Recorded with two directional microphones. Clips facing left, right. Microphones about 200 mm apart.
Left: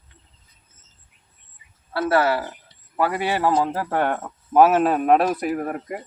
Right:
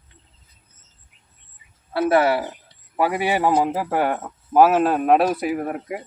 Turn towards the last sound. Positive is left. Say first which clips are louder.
# right 1 dB
turn(degrees=-5)  # may be behind; listen again after turning